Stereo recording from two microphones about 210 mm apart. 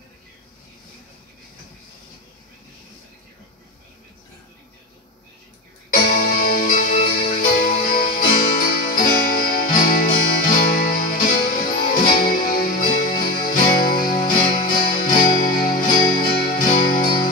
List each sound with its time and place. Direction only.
5.9 s music: 45° left (ahead or behind)